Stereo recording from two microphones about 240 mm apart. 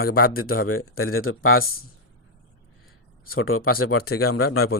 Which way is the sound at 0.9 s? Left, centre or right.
Left.